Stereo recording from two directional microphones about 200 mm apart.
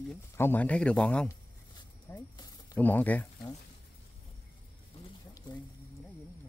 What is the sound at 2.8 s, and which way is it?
Speech, 10° left (ahead or behind).